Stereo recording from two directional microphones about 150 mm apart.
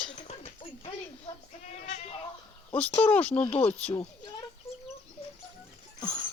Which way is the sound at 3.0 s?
10° left (ahead or behind).